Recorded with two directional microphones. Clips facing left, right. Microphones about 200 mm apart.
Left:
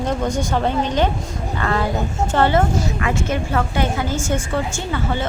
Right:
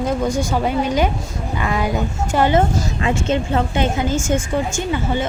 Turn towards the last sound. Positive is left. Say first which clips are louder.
# right 3 dB
turn(degrees=-15)  # may be behind; listen again after turning